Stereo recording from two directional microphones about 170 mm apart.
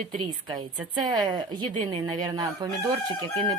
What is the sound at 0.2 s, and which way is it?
A woman's voice, 25° right (ahead or behind).